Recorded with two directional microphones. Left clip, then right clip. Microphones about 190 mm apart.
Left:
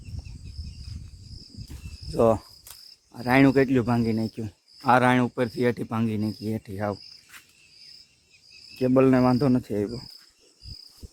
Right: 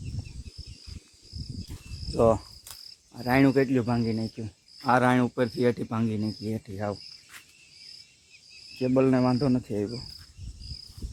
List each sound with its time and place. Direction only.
2.1 s cricket: 25° left (ahead or behind)
3.1 s speech: 25° left (ahead or behind); by 4.4 s 55° left (ahead or behind)
4.8 s speech: 20° left (ahead or behind)
8.8 s speech: 45° left (ahead or behind)
9.6 s cricket: 25° left (ahead or behind)